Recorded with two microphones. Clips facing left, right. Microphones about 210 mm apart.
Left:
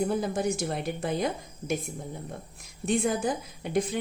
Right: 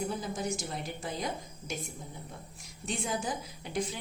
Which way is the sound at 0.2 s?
60° left (ahead or behind).